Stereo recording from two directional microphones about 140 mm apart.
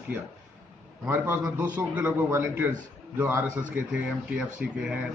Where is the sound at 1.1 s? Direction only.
15° right (ahead or behind).